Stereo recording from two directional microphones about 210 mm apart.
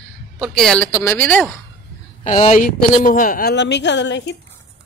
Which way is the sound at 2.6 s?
40° left (ahead or behind).